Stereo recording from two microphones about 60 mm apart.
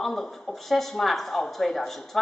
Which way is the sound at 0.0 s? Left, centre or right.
Centre.